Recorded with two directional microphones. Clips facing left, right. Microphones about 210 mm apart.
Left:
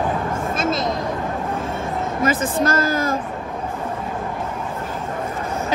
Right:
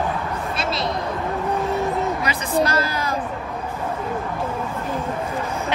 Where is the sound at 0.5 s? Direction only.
45° left (ahead or behind).